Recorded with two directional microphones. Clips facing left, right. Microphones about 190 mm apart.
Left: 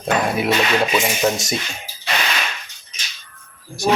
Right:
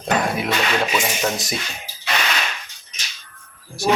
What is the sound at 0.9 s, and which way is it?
Speech, 5° left (ahead or behind).